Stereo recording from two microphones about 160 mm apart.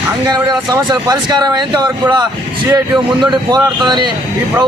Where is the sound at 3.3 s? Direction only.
25° right (ahead or behind).